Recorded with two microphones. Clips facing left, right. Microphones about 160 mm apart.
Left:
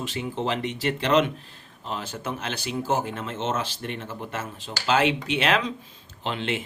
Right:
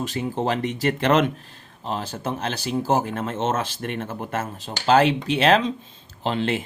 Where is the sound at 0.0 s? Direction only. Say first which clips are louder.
Right 4 dB; 45° right (ahead or behind).